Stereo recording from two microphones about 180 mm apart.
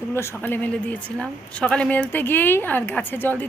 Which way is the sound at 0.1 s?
15° left (ahead or behind).